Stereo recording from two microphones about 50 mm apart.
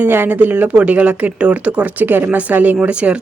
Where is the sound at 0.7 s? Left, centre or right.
Right.